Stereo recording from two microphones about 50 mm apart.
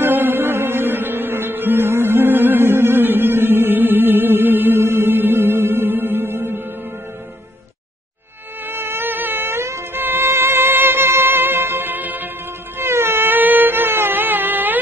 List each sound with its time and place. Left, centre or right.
0.0 s music: right
8.6 s insect: right
9.9 s music: right
12.7 s a sound: right